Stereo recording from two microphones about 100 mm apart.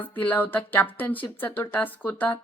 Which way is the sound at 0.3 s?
20° left (ahead or behind).